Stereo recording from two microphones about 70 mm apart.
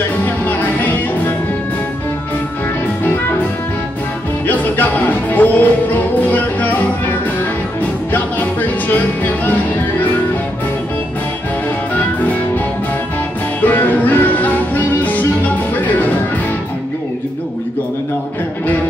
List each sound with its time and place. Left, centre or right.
0.2 s music: left
3.0 s music: left
4.5 s music: left
11.9 s music: left
13.6 s music: left